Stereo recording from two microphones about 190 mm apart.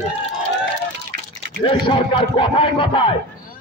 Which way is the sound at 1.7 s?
25° left (ahead or behind).